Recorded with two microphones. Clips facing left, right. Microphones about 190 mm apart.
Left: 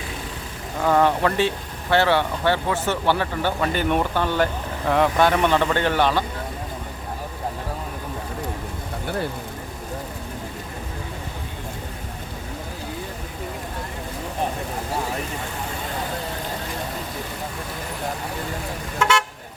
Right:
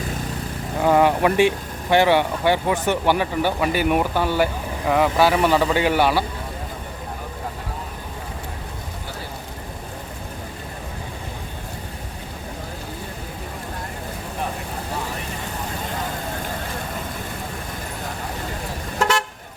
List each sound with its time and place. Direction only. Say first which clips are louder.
0.8 s speech: right 2 dB; 15° right (ahead or behind)
18.9 s car: even; 35° right (ahead or behind)